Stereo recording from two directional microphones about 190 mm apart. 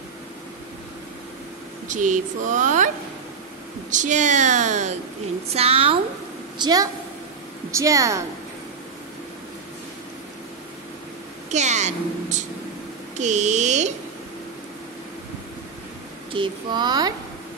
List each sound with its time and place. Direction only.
1.9 s a woman's voice: 40° right (ahead or behind)
3.9 s a woman's voice: 40° right (ahead or behind)
6.6 s a woman's voice: 20° right (ahead or behind)
11.5 s speech: 35° right (ahead or behind)
13.2 s a woman's voice: 40° right (ahead or behind)
16.3 s speech: 20° right (ahead or behind)